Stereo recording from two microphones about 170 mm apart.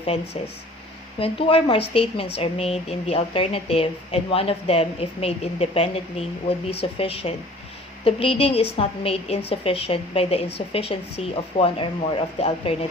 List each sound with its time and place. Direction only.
1.2 s speech: 35° left (ahead or behind)